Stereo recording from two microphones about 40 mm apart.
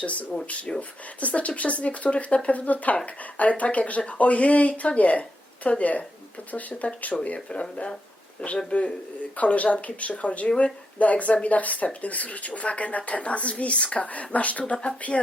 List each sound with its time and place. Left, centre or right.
0.0 s speech: left